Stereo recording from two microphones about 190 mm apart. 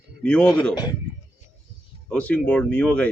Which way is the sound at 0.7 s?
20° left (ahead or behind).